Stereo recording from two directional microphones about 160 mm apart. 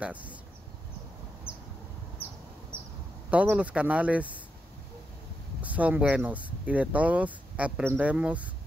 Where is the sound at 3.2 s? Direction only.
10° right (ahead or behind).